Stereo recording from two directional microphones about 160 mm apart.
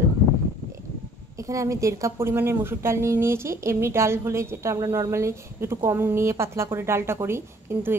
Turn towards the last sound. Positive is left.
turn(degrees=-15)  # may be behind; listen again after turning